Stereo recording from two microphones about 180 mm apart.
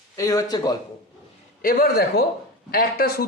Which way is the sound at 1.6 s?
60° left (ahead or behind).